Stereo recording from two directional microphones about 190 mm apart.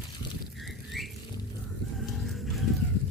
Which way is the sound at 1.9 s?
Centre (ahead or behind).